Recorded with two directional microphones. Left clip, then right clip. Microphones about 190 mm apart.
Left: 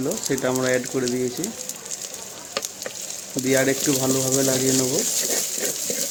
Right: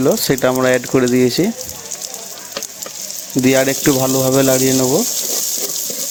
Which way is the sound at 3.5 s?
45° right (ahead or behind).